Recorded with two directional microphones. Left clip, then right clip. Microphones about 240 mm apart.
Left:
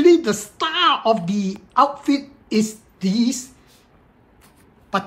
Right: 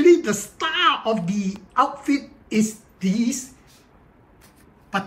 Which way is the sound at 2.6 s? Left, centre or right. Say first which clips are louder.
Left 1 dB; centre.